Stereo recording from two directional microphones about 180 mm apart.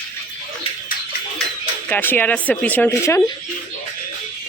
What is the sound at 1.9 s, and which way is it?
Speech, 10° left (ahead or behind).